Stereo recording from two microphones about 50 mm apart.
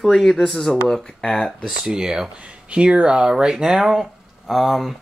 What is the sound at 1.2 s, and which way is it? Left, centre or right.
Speech, centre.